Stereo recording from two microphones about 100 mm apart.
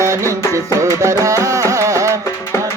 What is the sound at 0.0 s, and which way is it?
Music, 30° right (ahead or behind).